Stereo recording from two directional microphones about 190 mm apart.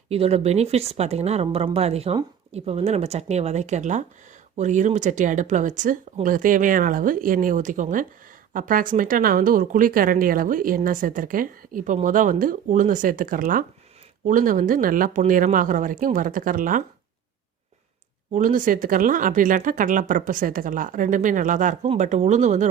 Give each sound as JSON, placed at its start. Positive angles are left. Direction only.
{"t": 0.1, "sound": "a woman's voice", "side_deg": -35}
{"t": 18.3, "sound": "a woman's voice", "side_deg": -45}